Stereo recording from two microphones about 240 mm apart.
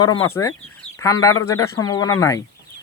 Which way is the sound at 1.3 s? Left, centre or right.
Left.